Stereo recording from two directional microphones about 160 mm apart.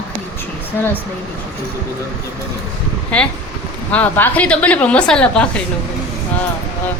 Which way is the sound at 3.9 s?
10° left (ahead or behind).